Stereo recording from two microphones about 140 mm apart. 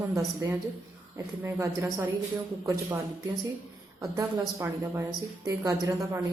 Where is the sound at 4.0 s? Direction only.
25° right (ahead or behind).